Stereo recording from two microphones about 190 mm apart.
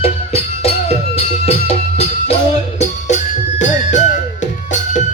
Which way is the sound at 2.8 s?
40° left (ahead or behind).